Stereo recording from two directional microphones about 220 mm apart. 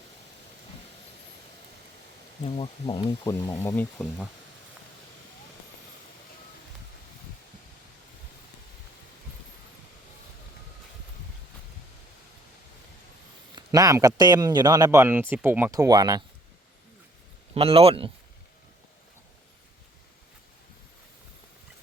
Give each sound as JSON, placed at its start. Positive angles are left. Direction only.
{"t": 2.4, "sound": "speech", "side_deg": 25}
{"t": 13.6, "sound": "speech", "side_deg": -15}
{"t": 17.5, "sound": "speech", "side_deg": -25}